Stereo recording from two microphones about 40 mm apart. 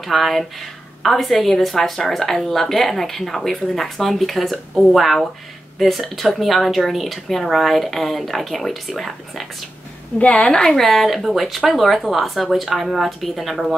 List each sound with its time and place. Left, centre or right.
0.0 s speech: centre
10.1 s a woman's voice: left
10.4 s a woman's voice: centre
10.8 s speech: centre